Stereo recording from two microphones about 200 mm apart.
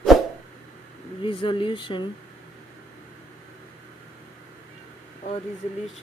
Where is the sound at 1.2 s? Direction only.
25° left (ahead or behind).